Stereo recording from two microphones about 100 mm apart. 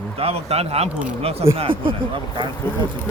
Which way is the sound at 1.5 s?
65° right (ahead or behind).